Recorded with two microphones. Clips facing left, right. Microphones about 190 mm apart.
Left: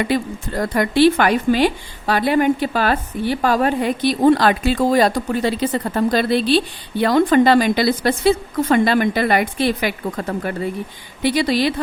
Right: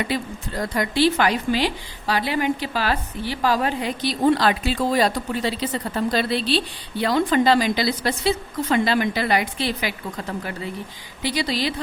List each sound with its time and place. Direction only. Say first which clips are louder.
0.1 s a woman's voice: left 6 dB; 55° left (ahead or behind)